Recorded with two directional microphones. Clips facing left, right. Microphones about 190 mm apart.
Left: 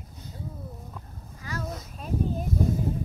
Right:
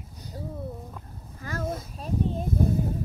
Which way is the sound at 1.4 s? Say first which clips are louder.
Right 3 dB; 50° right (ahead or behind).